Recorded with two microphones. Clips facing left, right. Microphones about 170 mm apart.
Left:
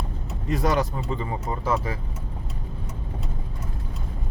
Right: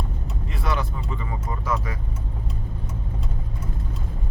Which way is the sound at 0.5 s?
40° left (ahead or behind).